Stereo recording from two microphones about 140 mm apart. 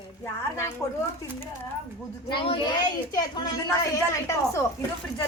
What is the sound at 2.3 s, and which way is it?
A woman's voice, 35° left (ahead or behind).